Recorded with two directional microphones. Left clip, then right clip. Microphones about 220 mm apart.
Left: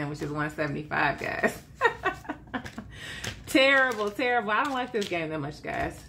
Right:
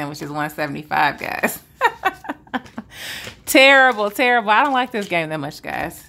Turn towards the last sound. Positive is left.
turn(degrees=-45)  # may be behind; listen again after turning